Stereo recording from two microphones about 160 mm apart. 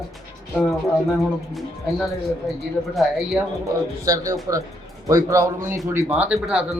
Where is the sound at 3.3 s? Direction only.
20° right (ahead or behind).